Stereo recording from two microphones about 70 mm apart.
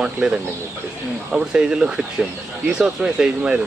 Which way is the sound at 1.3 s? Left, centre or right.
Centre.